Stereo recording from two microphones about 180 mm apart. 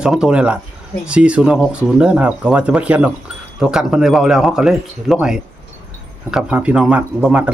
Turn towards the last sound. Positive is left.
turn(degrees=-5)  # may be behind; listen again after turning